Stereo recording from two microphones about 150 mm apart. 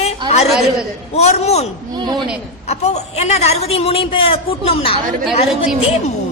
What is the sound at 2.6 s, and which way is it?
A woman's voice, 45° left (ahead or behind).